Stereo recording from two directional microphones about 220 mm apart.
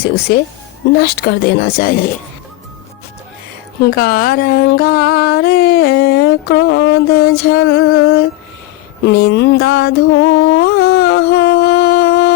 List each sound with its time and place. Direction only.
0.0 s speech: 45° left (ahead or behind)
3.8 s speech: 45° left (ahead or behind)
9.0 s a sound: 50° left (ahead or behind)